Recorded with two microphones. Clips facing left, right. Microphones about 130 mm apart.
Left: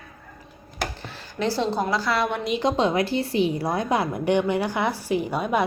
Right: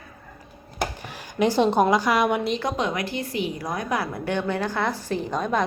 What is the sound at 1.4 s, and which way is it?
A woman's voice, 20° right (ahead or behind).